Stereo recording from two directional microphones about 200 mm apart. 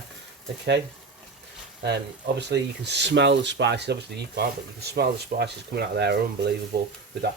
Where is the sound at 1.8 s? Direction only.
55° right (ahead or behind).